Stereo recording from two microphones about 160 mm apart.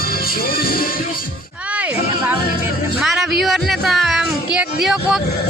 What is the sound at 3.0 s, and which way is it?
Music, centre (ahead or behind).